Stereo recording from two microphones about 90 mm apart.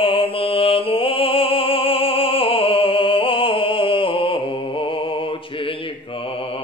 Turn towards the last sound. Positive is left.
turn(degrees=80)